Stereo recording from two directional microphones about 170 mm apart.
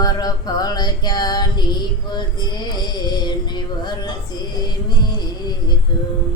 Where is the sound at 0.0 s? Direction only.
20° left (ahead or behind).